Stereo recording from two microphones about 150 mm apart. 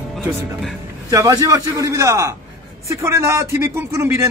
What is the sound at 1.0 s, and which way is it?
A man's voice, 25° right (ahead or behind).